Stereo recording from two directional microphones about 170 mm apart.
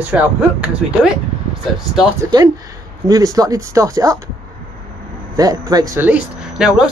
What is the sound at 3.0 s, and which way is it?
Speech, 20° right (ahead or behind).